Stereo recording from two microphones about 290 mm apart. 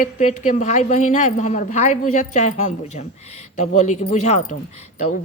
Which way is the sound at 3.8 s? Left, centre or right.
Left.